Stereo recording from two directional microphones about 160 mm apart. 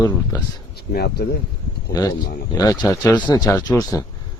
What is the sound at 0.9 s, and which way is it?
Speech, 85° left.